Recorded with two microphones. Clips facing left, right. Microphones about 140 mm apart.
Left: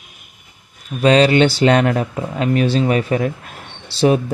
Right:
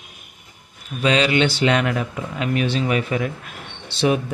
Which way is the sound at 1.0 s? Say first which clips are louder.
Left 6 dB; 40° left (ahead or behind).